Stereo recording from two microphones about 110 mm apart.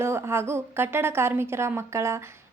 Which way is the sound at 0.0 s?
25° right (ahead or behind).